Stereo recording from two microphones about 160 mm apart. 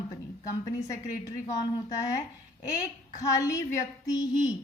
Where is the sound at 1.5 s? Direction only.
20° left (ahead or behind).